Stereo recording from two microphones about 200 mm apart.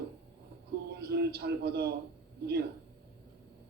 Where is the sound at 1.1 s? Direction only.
55° right (ahead or behind).